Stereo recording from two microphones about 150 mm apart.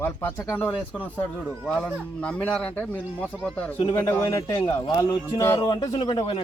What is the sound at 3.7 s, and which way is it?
Speech, 35° left (ahead or behind).